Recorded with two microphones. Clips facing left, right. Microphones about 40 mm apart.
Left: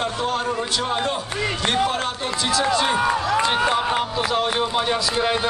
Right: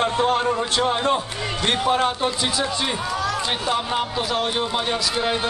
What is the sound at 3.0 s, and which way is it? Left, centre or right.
Speech, left.